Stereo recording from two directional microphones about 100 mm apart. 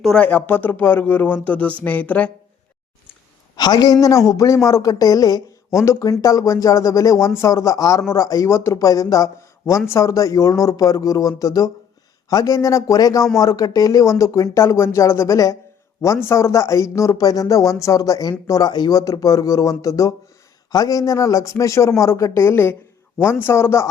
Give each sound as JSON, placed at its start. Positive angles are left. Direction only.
{"t": 0.2, "sound": "speech", "side_deg": 20}
{"t": 3.5, "sound": "a woman's voice", "side_deg": 45}